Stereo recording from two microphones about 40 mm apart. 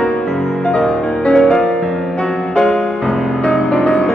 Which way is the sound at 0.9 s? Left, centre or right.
Centre.